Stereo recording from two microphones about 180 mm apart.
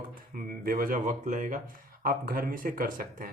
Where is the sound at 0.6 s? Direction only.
50° right (ahead or behind).